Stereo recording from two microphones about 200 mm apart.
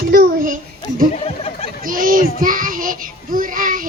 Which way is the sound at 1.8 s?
45° right (ahead or behind).